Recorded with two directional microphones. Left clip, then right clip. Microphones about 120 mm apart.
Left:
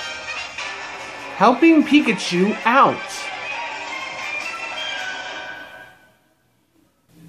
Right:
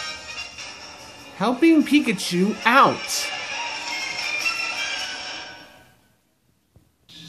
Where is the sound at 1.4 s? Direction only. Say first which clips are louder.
Left 5 dB; 25° left (ahead or behind).